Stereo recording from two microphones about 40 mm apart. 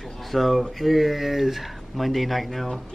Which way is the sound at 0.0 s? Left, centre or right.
Centre.